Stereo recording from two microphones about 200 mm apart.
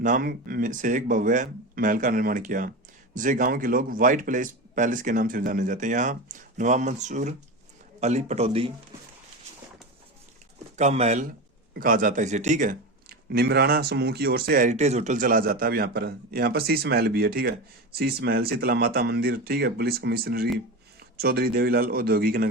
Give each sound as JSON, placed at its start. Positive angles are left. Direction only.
{"t": 0.0, "sound": "a man's voice", "side_deg": -45}
{"t": 10.8, "sound": "a man's voice", "side_deg": -35}